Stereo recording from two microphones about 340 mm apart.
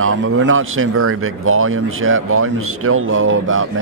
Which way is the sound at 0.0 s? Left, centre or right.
Right.